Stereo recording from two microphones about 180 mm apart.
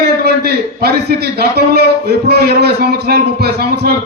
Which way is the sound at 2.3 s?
60° right (ahead or behind).